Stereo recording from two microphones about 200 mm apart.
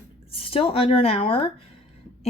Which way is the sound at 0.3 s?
30° left (ahead or behind).